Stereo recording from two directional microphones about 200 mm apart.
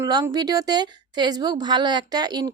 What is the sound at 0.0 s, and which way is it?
A woman's voice, 20° right (ahead or behind).